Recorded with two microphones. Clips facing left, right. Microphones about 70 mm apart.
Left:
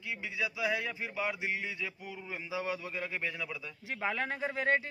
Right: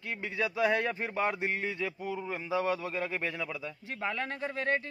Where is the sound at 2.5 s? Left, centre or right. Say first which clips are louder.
Right 6 dB; centre.